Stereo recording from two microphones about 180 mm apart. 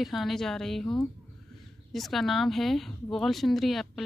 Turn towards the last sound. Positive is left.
turn(degrees=0)  # may be behind; listen again after turning